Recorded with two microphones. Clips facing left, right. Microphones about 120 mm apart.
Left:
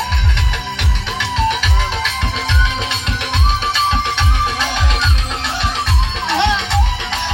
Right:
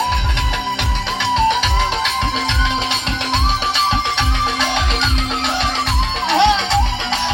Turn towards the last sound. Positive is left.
turn(degrees=-15)  # may be behind; listen again after turning